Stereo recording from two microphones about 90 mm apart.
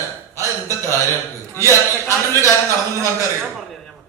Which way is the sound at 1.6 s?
35° right (ahead or behind).